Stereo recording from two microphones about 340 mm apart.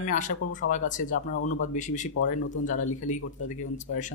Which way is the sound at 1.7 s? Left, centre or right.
Left.